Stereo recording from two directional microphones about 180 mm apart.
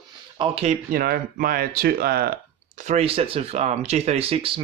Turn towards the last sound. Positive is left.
turn(degrees=-30)  # may be behind; listen again after turning